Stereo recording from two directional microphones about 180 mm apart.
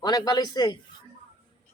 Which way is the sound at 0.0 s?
25° left (ahead or behind).